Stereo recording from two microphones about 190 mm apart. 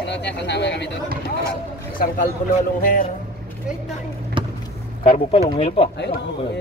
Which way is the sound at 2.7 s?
45° left (ahead or behind).